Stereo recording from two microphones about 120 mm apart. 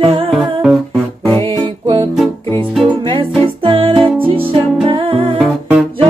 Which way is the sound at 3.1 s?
45° right (ahead or behind).